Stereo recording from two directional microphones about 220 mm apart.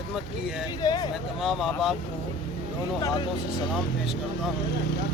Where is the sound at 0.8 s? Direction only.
20° left (ahead or behind).